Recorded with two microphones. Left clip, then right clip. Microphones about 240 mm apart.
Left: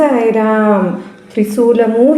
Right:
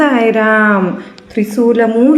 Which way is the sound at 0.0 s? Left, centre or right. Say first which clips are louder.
Even; right.